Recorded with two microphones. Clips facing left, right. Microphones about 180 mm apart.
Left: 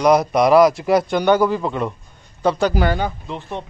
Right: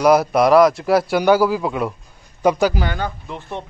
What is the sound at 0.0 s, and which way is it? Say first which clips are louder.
A man's voice: right 1 dB; 5° right (ahead or behind).